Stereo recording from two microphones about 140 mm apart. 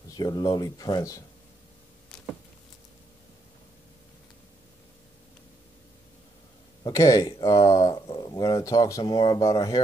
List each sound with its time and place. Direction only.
0.1 s speech: 30° left (ahead or behind)
6.8 s speech: 25° left (ahead or behind)